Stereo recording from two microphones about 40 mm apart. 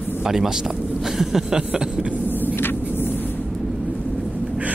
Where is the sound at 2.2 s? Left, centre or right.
Left.